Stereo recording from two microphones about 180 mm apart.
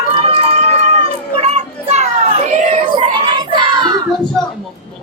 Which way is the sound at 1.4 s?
35° right (ahead or behind).